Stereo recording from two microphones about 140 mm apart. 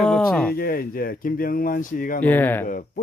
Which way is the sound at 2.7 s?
80° left.